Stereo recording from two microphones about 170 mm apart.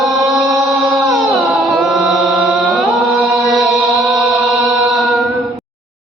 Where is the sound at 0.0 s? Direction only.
Centre (ahead or behind).